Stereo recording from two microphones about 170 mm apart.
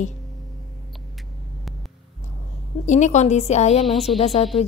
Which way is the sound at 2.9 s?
45° left (ahead or behind).